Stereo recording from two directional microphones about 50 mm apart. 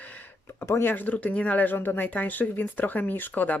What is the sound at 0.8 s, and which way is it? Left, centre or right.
Speech, left.